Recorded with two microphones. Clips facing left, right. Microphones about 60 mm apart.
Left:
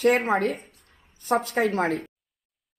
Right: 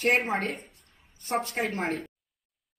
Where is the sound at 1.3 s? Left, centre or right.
Left.